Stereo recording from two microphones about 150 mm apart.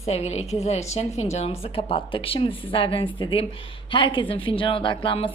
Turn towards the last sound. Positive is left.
turn(degrees=35)  # may be behind; listen again after turning